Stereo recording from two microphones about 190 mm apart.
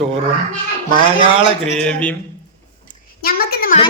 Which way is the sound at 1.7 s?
5° left (ahead or behind).